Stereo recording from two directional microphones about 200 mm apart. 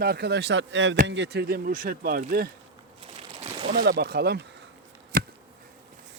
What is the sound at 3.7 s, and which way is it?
Speech, 55° right (ahead or behind).